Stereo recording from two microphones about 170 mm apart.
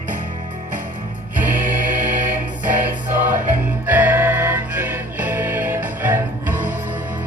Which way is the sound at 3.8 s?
10° right (ahead or behind).